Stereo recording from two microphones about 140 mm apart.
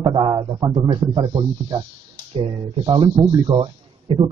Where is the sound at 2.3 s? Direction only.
40° right (ahead or behind).